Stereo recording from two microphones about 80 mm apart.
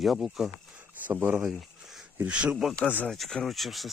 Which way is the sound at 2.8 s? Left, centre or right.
Left.